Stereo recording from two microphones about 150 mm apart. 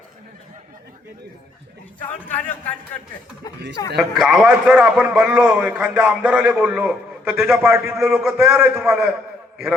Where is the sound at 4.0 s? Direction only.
Centre (ahead or behind).